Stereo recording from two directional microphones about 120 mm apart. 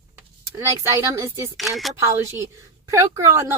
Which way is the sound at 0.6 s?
25° right (ahead or behind).